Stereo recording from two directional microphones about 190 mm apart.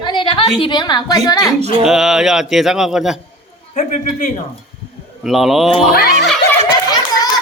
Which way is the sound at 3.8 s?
40° left (ahead or behind).